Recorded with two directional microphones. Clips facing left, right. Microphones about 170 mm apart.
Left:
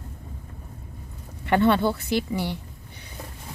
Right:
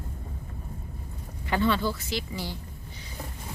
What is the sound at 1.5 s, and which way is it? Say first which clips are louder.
Speech: left 6 dB; 60° left (ahead or behind).